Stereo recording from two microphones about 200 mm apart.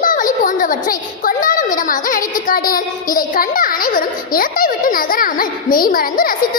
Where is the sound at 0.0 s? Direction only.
40° left (ahead or behind).